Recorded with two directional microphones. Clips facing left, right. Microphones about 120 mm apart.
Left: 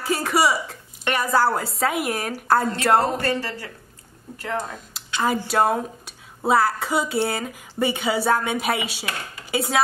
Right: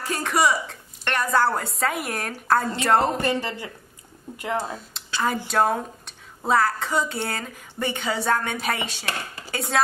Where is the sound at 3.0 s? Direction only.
20° right (ahead or behind).